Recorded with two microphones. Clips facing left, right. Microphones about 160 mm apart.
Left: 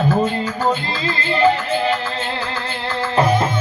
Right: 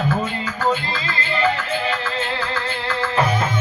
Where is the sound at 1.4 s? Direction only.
30° left (ahead or behind).